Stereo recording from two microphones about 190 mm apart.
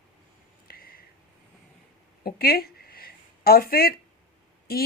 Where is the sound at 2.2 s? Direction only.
50° left (ahead or behind).